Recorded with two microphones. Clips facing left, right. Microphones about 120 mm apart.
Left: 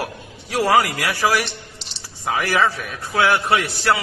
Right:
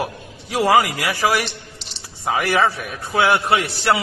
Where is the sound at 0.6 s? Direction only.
15° right (ahead or behind).